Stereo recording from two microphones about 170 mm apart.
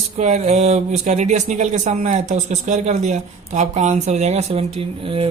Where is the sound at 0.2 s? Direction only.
40° right (ahead or behind).